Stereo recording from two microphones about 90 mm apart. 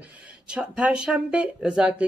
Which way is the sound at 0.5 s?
10° right (ahead or behind).